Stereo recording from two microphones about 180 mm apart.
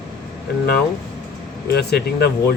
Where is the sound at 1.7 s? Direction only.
65° left (ahead or behind).